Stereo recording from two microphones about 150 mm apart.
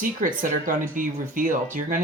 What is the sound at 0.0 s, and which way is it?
Speech, 65° right (ahead or behind).